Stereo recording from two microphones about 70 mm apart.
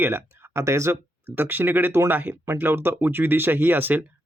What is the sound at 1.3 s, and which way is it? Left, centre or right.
Speech, right.